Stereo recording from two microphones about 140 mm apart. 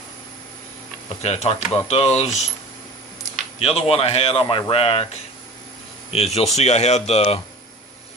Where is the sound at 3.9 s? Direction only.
45° left (ahead or behind).